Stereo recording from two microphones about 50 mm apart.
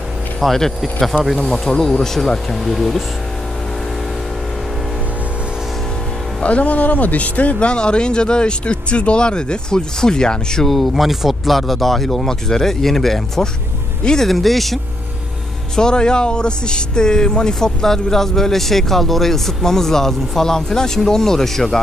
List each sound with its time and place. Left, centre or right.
0.4 s speech: centre
6.4 s speech: left
7.5 s speech: centre
10.7 s speech: centre
15.7 s speech: centre